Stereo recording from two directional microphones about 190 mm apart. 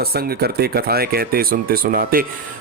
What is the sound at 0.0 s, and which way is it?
Speech, 55° right (ahead or behind).